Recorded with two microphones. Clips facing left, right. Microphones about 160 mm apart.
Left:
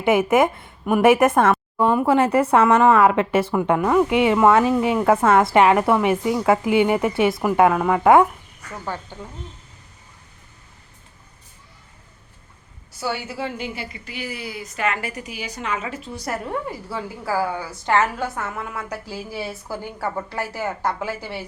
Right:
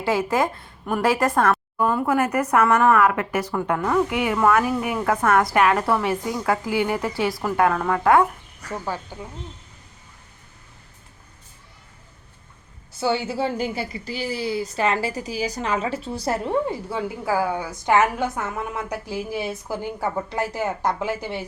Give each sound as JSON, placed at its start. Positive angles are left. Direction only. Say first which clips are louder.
{"t": 0.0, "sound": "speech", "louder": "left 5 dB", "side_deg": 20}
{"t": 8.8, "sound": "speech", "louder": "left 3 dB", "side_deg": -10}
{"t": 13.0, "sound": "a woman's voice", "louder": "right 4 dB", "side_deg": -25}